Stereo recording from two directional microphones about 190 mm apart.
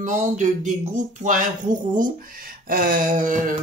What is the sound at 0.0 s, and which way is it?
Speech, 40° right (ahead or behind).